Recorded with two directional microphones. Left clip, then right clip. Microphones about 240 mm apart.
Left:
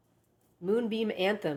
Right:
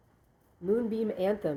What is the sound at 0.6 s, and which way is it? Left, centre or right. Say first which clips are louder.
Speech: even; centre.